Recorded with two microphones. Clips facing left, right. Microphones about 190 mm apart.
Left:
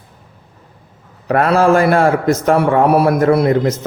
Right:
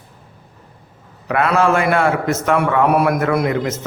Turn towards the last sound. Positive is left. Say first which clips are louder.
# left 5 dB
turn(degrees=35)  # may be behind; listen again after turning